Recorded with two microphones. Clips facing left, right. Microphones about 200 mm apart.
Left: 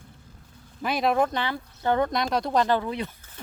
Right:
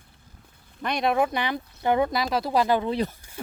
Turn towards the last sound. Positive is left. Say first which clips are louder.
# right 5 dB
turn(degrees=-30)  # may be behind; listen again after turning